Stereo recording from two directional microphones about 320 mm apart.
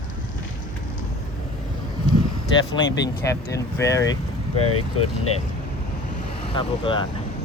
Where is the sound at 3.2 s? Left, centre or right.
Centre.